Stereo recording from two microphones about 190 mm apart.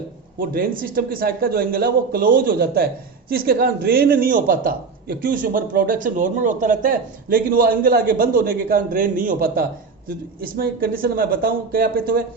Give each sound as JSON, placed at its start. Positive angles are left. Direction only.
{"t": 0.3, "sound": "a man's voice", "side_deg": -50}